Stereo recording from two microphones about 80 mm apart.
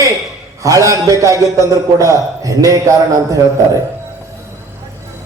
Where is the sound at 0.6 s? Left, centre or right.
Right.